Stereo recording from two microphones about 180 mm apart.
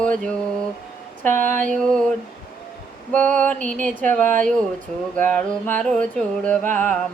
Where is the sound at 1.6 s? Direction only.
5° left (ahead or behind).